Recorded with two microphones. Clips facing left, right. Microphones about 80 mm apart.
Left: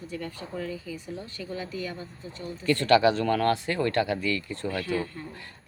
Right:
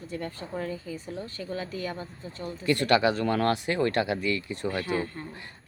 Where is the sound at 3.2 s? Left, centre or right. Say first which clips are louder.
Left 1 dB; right.